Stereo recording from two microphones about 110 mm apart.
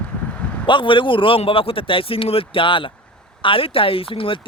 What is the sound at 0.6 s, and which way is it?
Speech, 50° left (ahead or behind).